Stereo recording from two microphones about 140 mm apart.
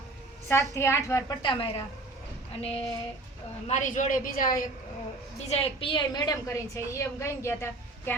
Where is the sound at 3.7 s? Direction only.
60° left (ahead or behind); by 4.7 s 80° left.